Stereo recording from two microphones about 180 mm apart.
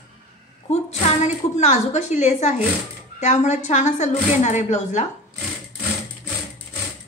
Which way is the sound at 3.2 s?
40° left (ahead or behind).